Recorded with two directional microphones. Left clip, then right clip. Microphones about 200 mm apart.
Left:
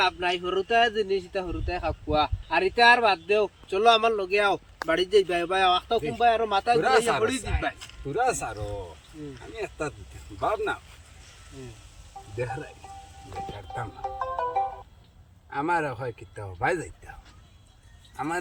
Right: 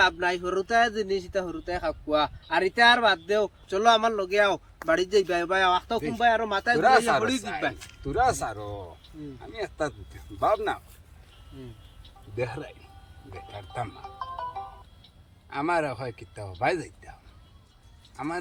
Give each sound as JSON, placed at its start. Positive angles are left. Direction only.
{"t": 0.0, "sound": "a man's voice", "side_deg": 0}
{"t": 3.7, "sound": "speech", "side_deg": -10}
{"t": 13.6, "sound": "a man's voice", "side_deg": -5}
{"t": 14.0, "sound": "music", "side_deg": 20}
{"t": 15.4, "sound": "a man's voice", "side_deg": 0}